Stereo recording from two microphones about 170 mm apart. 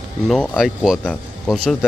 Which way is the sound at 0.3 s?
Centre (ahead or behind).